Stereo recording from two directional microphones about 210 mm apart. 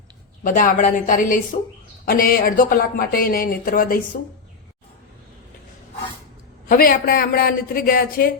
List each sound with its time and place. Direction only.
0.4 s a woman's voice: 40° left (ahead or behind)
6.7 s speech: 45° left (ahead or behind)